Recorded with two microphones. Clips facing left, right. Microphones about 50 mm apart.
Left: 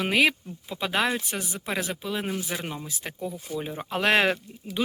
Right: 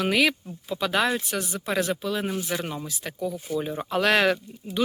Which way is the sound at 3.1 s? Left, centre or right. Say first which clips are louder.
Right 4 dB; left.